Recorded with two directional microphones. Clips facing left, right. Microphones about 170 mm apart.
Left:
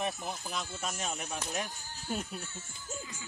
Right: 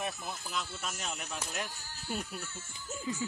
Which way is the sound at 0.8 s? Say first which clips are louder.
Left 3 dB; 40° left (ahead or behind).